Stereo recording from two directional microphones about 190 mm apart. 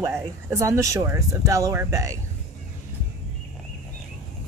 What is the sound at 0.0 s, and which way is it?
Speech, 15° right (ahead or behind).